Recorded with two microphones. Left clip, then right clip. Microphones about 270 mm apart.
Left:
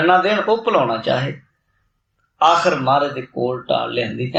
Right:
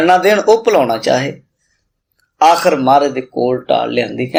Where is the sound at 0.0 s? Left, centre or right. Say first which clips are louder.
Right 5 dB; right.